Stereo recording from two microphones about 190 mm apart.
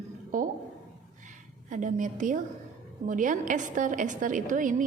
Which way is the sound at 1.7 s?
40° right (ahead or behind).